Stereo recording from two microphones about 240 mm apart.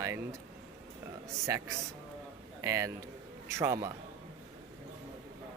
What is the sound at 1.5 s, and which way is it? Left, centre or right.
A man's voice, centre.